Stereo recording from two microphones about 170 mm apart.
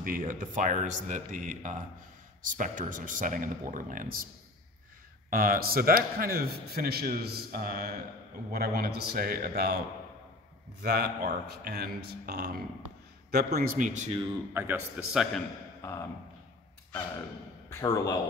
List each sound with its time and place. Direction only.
0.0 s speech: 55° right (ahead or behind)
5.3 s speech: 60° right (ahead or behind)
10.8 s a man's voice: 70° right (ahead or behind); by 14.2 s 45° right (ahead or behind)
14.5 s a man's voice: 10° right (ahead or behind)
15.8 s speech: 15° left (ahead or behind)
17.7 s a man's voice: 20° left (ahead or behind)